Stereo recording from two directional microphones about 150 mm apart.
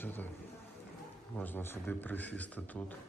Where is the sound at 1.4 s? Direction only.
15° left (ahead or behind).